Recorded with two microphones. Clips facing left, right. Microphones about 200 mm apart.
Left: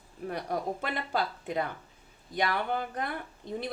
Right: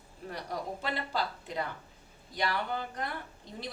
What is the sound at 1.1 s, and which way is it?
A woman's voice, 55° left (ahead or behind).